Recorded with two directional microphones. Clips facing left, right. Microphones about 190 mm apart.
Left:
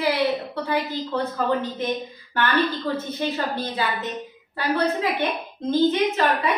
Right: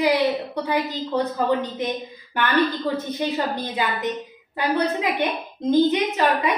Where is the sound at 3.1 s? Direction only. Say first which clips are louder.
Right 1 dB; 15° right (ahead or behind).